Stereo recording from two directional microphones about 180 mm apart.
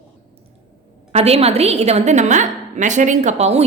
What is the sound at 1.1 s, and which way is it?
A woman's voice, 35° right (ahead or behind).